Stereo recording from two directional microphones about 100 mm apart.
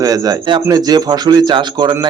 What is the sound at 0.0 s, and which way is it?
Speech, 40° right (ahead or behind).